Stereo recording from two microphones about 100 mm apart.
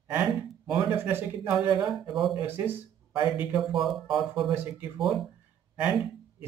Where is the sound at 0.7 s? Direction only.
20° right (ahead or behind).